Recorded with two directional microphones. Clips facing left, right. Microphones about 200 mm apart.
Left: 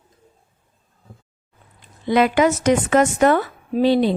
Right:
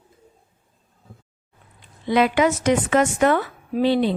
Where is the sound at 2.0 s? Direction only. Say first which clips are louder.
Left 2 dB; 45° left (ahead or behind).